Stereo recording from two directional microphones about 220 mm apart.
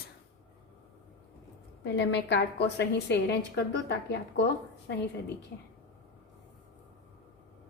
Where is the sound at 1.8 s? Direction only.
50° left (ahead or behind).